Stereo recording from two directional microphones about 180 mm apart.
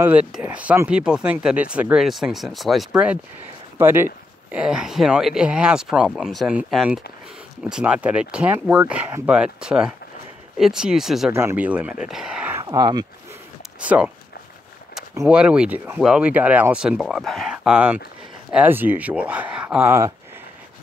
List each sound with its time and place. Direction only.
0.0 s speech: 5° right (ahead or behind)
12.6 s speech: 20° right (ahead or behind)
13.7 s speech: 5° right (ahead or behind)
15.2 s speech: 5° right (ahead or behind)